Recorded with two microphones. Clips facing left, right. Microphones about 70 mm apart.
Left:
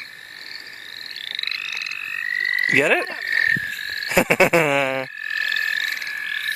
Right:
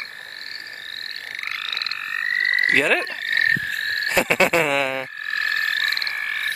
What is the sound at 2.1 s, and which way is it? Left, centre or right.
Frog, right.